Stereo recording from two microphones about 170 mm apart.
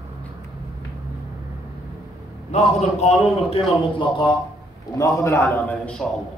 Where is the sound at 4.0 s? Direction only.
25° left (ahead or behind); by 6.1 s 5° left (ahead or behind).